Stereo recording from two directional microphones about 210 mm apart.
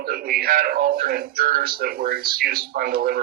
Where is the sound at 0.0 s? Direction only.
45° right (ahead or behind).